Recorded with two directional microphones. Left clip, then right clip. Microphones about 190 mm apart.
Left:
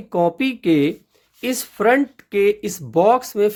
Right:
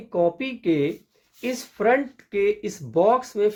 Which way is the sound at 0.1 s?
55° left (ahead or behind).